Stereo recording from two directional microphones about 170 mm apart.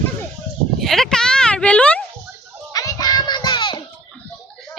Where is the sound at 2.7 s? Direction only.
20° left (ahead or behind).